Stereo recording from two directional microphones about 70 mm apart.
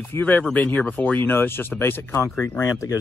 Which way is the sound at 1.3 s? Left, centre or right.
Left.